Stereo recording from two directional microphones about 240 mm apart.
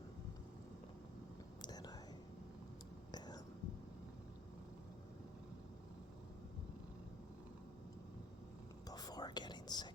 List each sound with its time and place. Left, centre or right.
1.6 s whispering: centre
3.1 s whispering: centre
8.9 s whispering: centre